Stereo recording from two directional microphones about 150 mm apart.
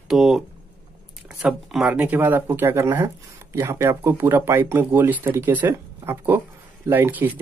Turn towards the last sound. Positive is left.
turn(degrees=-10)  # may be behind; listen again after turning